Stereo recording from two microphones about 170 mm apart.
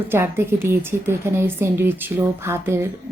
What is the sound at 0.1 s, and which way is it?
Speech, 15° right (ahead or behind).